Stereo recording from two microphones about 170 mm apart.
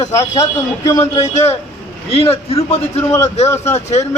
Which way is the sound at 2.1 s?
35° left (ahead or behind).